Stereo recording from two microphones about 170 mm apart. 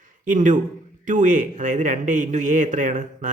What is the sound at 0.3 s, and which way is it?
Speech, 50° right (ahead or behind).